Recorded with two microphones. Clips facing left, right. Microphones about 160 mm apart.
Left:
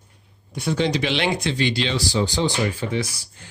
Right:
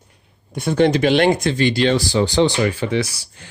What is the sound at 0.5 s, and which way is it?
Speech, 50° right (ahead or behind).